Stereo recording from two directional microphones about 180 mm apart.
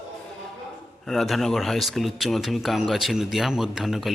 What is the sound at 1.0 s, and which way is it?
A man's voice, centre (ahead or behind).